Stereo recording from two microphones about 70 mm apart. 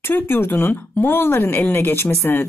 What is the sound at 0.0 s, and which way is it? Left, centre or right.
Speech, left.